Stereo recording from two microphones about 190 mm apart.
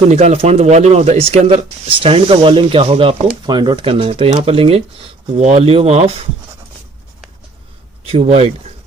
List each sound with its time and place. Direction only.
0.1 s speech: 35° right (ahead or behind)
8.0 s speech: 30° right (ahead or behind)